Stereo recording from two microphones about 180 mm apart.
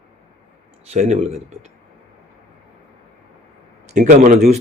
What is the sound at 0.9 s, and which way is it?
Speech, 40° right (ahead or behind).